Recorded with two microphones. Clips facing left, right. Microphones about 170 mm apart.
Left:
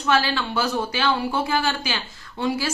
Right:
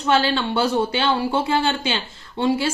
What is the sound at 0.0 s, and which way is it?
Speech, 30° right (ahead or behind).